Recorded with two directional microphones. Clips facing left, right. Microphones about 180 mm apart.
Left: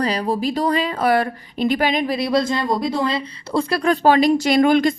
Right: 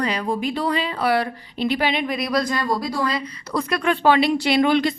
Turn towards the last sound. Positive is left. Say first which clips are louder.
# left 3 dB
turn(degrees=45)  # may be behind; listen again after turning